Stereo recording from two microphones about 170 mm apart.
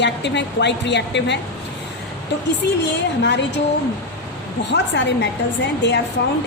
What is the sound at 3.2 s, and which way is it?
Speech, 90° left.